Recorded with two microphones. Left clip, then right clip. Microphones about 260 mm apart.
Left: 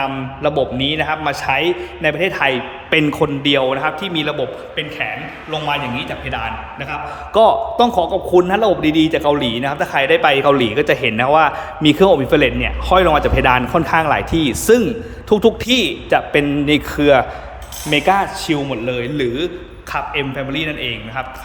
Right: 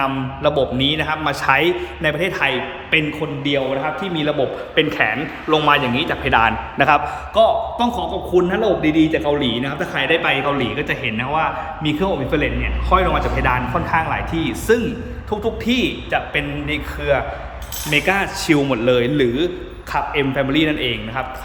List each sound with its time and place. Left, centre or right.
0.0 s a man's voice: centre
4.7 s a man's voice: centre
7.3 s a man's voice: centre
17.9 s a man's voice: centre